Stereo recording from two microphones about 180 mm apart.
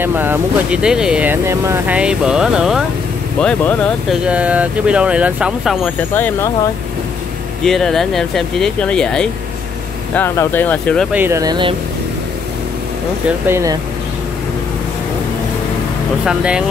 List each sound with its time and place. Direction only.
0.0 s speech: 10° right (ahead or behind); by 4.2 s 5° left (ahead or behind)
4.3 s speech: 5° right (ahead or behind)
6.1 s speech: 10° left (ahead or behind)
7.6 s speech: centre (ahead or behind)
10.1 s speech: 15° left (ahead or behind)
11.1 s speech: 10° right (ahead or behind)
13.5 s speech: 15° right (ahead or behind)
16.3 s speech: 5° right (ahead or behind)